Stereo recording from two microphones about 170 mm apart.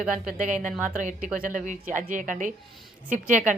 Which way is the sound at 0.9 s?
45° right (ahead or behind).